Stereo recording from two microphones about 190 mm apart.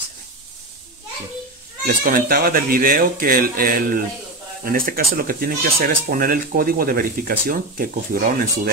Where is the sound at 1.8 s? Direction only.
50° right (ahead or behind).